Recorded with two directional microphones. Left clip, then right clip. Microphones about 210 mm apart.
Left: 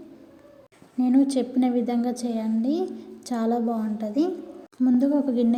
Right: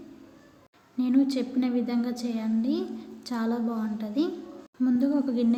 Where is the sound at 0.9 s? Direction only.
10° left (ahead or behind).